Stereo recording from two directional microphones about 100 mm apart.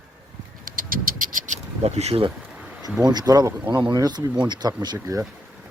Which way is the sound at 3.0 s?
40° right (ahead or behind).